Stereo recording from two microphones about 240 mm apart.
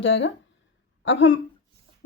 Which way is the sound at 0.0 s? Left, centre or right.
Left.